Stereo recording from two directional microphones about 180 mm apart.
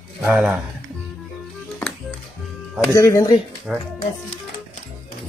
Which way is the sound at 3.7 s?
5° right (ahead or behind).